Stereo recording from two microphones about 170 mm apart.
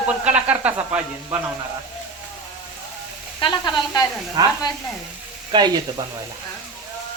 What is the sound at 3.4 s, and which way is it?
Speech, 25° left (ahead or behind).